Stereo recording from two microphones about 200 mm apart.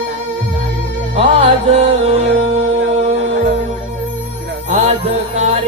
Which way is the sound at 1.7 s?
35° right (ahead or behind).